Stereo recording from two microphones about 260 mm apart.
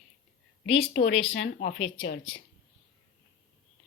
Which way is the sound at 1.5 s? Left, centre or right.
Left.